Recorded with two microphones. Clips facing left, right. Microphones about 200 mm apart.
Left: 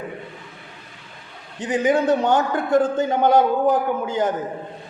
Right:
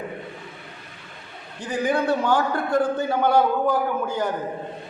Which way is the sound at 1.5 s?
20° left (ahead or behind).